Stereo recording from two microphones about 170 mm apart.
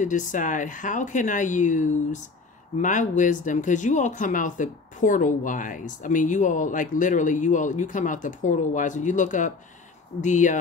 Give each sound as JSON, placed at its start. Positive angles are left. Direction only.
{"t": 0.0, "sound": "speech", "side_deg": 50}